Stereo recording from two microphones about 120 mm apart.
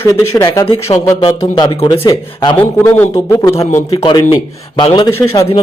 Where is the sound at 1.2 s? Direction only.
40° left (ahead or behind).